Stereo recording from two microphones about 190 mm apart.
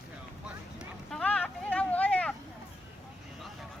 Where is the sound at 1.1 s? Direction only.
5° left (ahead or behind).